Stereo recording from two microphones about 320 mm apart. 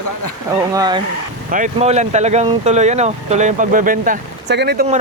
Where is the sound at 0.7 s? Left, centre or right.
Centre.